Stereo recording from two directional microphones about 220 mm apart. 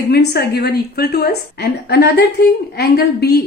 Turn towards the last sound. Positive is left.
turn(degrees=45)  # may be behind; listen again after turning